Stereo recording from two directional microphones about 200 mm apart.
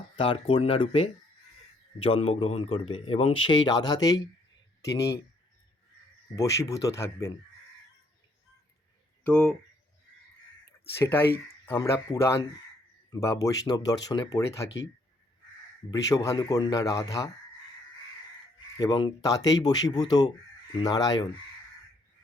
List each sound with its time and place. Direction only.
0.2 s speech: 25° left (ahead or behind)
6.3 s speech: 15° left (ahead or behind)
9.2 s speech: 5° left (ahead or behind)
11.0 s speech: 10° left (ahead or behind)
15.9 s speech: 15° left (ahead or behind)
18.8 s speech: 20° left (ahead or behind)